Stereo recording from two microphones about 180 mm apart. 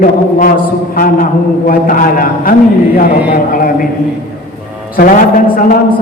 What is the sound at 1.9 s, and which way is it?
Speech, 50° left (ahead or behind).